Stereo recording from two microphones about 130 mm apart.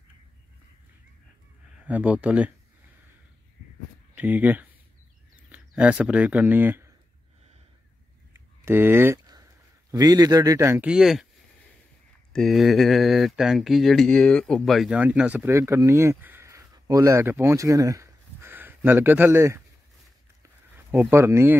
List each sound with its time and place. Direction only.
1.9 s speech: 10° right (ahead or behind)
4.1 s speech: 10° right (ahead or behind)
8.6 s speech: 15° right (ahead or behind)
9.3 s a sound: 30° right (ahead or behind)
10.9 s speech: 5° right (ahead or behind)
12.3 s speech: centre (ahead or behind)
15.0 s speech: 10° right (ahead or behind)
15.5 s speech: 20° right (ahead or behind)
20.9 s speech: 20° right (ahead or behind)